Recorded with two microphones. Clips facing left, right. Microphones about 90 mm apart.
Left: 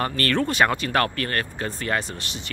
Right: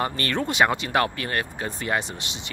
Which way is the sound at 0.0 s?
15° right (ahead or behind).